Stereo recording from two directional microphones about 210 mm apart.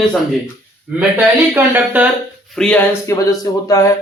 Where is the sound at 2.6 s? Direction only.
5° left (ahead or behind).